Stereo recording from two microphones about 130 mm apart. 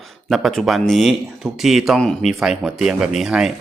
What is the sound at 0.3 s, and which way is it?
Speech, centre (ahead or behind).